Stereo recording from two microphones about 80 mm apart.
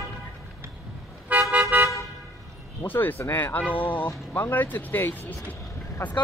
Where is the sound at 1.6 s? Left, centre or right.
Right.